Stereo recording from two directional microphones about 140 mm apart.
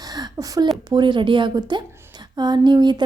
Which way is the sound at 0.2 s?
30° right (ahead or behind).